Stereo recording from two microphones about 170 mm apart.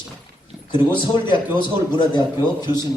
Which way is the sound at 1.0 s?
30° left (ahead or behind).